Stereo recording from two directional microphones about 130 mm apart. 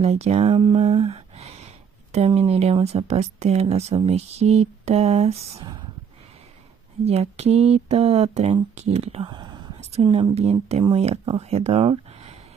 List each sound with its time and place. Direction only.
0.0 s speech: 55° right (ahead or behind)
0.7 s a sound: 50° right (ahead or behind)
2.1 s speech: 55° right (ahead or behind)
7.1 s speech: 55° right (ahead or behind)
9.3 s whispering: 35° right (ahead or behind)
10.0 s speech: 35° right (ahead or behind)
10.3 s speech: 55° right (ahead or behind)